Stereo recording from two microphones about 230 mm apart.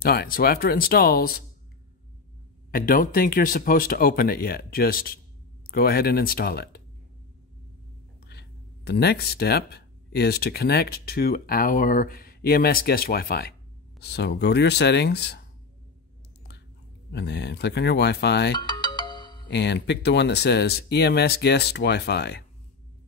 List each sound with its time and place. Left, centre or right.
0.0 s speech: left
2.7 s speech: left
8.3 s speech: left
17.1 s speech: left
18.5 s ringtone: centre
19.5 s speech: left